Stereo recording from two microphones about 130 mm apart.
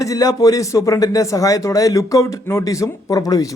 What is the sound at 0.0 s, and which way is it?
A man's voice, 25° left (ahead or behind).